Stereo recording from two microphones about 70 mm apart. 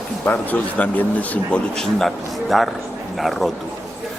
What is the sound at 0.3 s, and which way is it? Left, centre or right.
Speech, left.